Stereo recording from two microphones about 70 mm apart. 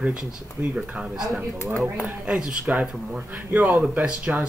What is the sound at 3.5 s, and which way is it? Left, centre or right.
Speech, right.